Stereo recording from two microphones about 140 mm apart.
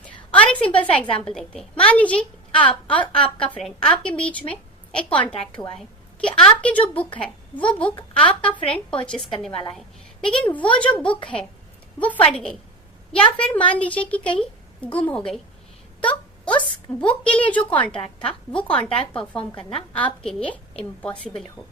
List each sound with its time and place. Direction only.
0.3 s a sound: 10° left (ahead or behind)
0.8 s a woman's voice: 5° left (ahead or behind)
3.0 s a woman's voice: 40° left (ahead or behind)
3.5 s a woman's voice: 5° left (ahead or behind)
9.7 s a sound: 5° left (ahead or behind)
10.4 s a woman's voice: 10° left (ahead or behind)
16.6 s a woman's voice: 10° left (ahead or behind)
19.5 s a woman's voice: 45° left (ahead or behind)
20.2 s a woman's voice: 10° left (ahead or behind)